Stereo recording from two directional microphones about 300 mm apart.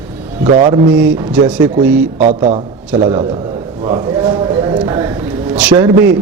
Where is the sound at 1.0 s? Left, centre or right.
Centre.